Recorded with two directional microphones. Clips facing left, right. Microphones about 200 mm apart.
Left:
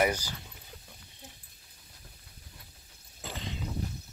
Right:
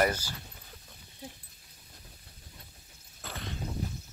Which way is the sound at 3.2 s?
15° left (ahead or behind).